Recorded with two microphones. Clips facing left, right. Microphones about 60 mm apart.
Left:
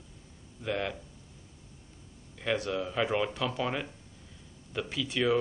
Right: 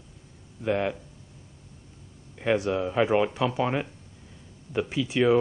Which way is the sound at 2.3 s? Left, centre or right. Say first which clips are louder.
Right 6 dB; right.